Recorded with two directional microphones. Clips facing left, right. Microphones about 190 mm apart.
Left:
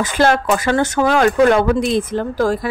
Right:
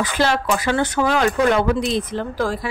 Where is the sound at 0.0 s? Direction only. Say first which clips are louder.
Left 4 dB; 50° left (ahead or behind).